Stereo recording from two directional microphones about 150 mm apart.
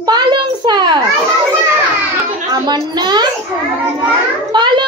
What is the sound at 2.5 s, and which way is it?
Speech, 30° right (ahead or behind).